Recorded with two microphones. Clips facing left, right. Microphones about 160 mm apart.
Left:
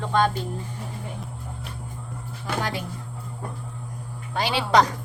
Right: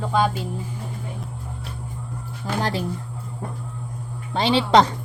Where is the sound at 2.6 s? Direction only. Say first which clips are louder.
Right 5 dB; 35° right (ahead or behind).